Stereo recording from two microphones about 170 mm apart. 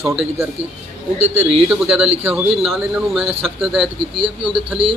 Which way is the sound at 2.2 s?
10° right (ahead or behind).